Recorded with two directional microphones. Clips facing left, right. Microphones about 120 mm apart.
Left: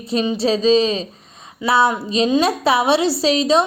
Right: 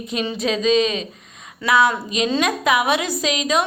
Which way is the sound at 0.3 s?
35° left (ahead or behind).